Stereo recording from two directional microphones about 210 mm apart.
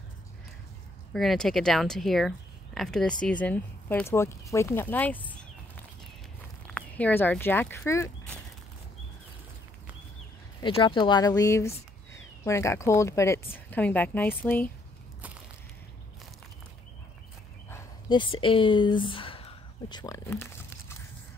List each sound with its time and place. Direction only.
1.1 s speech: centre (ahead or behind)
10.6 s speech: 25° left (ahead or behind); by 14.7 s 10° left (ahead or behind)
17.6 s a sound: 20° left (ahead or behind)
18.4 s speech: 25° left (ahead or behind)